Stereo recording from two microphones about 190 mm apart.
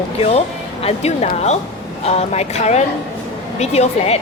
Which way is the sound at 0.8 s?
35° left (ahead or behind).